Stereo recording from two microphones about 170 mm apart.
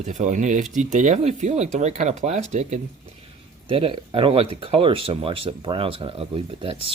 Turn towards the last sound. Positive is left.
turn(degrees=-35)  # may be behind; listen again after turning